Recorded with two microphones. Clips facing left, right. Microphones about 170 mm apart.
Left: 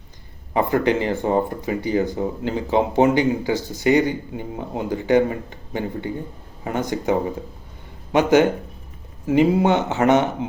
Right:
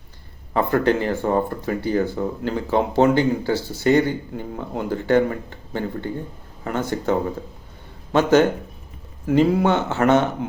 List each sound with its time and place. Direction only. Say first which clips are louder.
0.5 s speech: even; 15° left (ahead or behind)